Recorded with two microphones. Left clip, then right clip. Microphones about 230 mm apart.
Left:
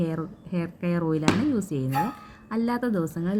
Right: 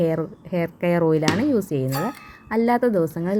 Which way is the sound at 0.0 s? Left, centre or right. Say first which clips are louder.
Right 9 dB; centre.